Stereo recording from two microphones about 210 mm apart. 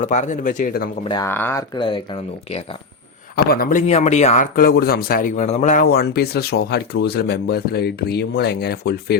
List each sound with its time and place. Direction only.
0.0 s speech: 35° left (ahead or behind)
1.0 s speech: 20° left (ahead or behind)
1.3 s speech: 10° left (ahead or behind)
3.3 s speech: 45° left (ahead or behind)